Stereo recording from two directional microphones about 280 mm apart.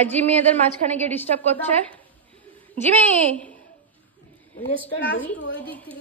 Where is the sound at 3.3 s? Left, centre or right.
Centre.